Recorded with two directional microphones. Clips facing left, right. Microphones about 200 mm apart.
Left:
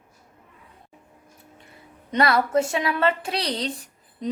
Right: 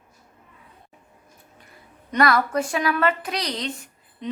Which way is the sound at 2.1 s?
25° left (ahead or behind).